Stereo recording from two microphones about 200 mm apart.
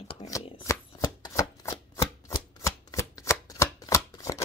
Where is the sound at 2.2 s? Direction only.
15° left (ahead or behind).